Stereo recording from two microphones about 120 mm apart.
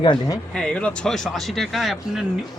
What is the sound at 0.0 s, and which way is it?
Speech, 40° left (ahead or behind).